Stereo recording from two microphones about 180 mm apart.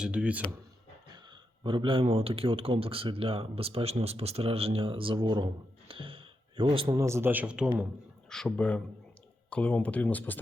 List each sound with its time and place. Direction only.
0.0 s speech: 5° right (ahead or behind)
1.1 s speech: 25° right (ahead or behind); by 7.7 s 5° right (ahead or behind)
8.3 s speech: 5° left (ahead or behind)